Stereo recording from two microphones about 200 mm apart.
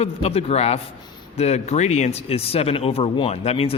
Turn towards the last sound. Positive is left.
turn(degrees=30)  # may be behind; listen again after turning